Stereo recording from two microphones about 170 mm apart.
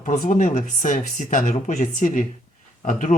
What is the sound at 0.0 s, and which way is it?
Speech, 45° left (ahead or behind).